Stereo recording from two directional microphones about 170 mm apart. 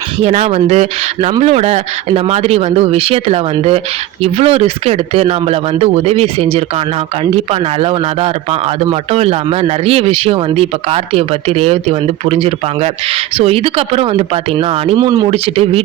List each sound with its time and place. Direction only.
0.2 s speech: 40° right (ahead or behind)
14.9 s speech: 20° right (ahead or behind)
15.3 s speech: 35° right (ahead or behind)